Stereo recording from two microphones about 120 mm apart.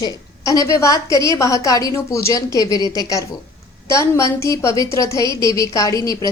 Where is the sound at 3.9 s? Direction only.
25° left (ahead or behind).